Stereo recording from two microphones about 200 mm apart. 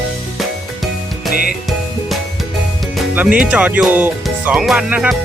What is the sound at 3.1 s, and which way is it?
Speech, 5° right (ahead or behind).